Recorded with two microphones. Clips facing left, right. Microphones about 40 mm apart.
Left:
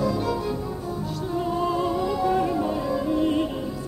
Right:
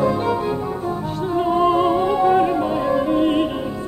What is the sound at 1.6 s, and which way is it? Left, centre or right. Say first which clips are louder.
Music: right 9 dB; right.